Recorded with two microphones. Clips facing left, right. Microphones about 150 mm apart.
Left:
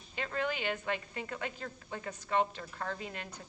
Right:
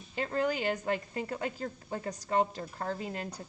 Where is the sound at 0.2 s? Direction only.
40° right (ahead or behind).